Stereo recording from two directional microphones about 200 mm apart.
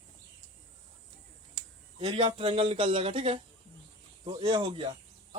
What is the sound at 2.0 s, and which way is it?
A man's voice, 30° right (ahead or behind).